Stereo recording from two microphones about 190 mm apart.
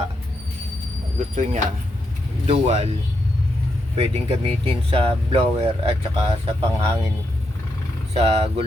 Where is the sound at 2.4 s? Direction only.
35° right (ahead or behind).